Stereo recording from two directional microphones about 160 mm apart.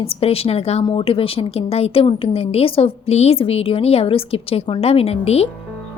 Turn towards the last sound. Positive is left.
turn(degrees=40)  # may be behind; listen again after turning